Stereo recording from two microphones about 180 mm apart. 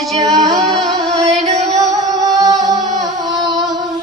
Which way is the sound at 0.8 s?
Centre (ahead or behind).